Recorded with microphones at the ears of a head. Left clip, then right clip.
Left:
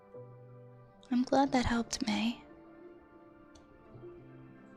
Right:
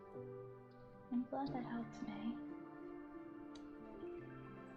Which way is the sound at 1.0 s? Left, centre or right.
Left.